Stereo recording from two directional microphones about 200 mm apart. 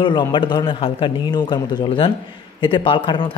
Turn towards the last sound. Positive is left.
turn(degrees=25)  # may be behind; listen again after turning